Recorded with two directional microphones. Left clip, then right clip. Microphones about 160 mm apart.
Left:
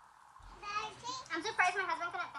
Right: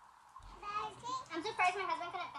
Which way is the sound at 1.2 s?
50° right (ahead or behind).